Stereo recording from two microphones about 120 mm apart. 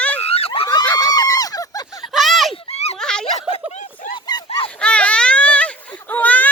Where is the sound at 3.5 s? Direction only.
75° left (ahead or behind).